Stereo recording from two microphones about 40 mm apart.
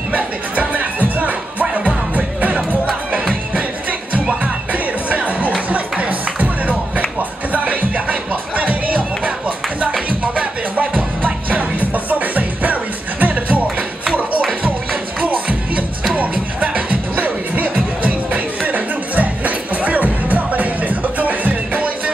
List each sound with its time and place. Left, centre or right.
0.1 s music: right
5.1 s music: right
11.9 s music: right
16.2 s music: right